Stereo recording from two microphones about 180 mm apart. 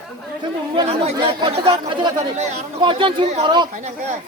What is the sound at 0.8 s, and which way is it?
A man's voice, 35° right (ahead or behind).